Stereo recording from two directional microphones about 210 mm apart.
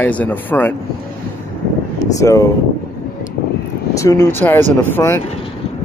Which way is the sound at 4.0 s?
15° left (ahead or behind).